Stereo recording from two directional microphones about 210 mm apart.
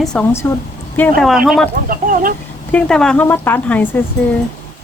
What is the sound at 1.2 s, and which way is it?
Speech, centre (ahead or behind).